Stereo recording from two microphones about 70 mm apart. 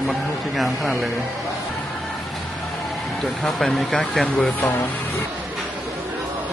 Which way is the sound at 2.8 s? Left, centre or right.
Centre.